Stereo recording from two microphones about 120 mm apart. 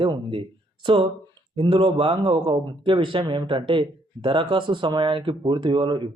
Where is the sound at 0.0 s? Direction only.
45° right (ahead or behind).